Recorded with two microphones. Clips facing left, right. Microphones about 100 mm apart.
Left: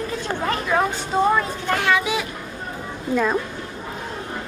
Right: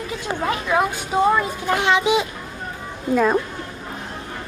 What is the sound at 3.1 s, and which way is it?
Speech, 10° right (ahead or behind).